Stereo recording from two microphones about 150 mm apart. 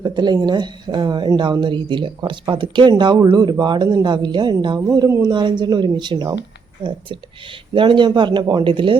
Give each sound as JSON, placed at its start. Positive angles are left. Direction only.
{"t": 0.0, "sound": "a woman's voice", "side_deg": -30}
{"t": 4.9, "sound": "speech", "side_deg": -20}
{"t": 7.7, "sound": "a woman's voice", "side_deg": -35}